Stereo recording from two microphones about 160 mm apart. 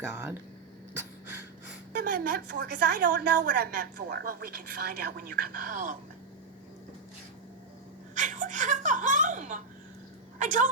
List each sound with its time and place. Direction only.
0.1 s speech: 10° right (ahead or behind)
2.0 s a woman's voice: 65° right (ahead or behind)
8.1 s speech: 50° right (ahead or behind)